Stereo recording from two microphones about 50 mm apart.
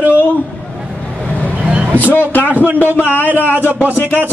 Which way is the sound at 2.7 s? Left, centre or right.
Left.